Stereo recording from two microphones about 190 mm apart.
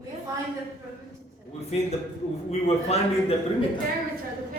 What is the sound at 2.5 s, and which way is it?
Speech, 35° left (ahead or behind).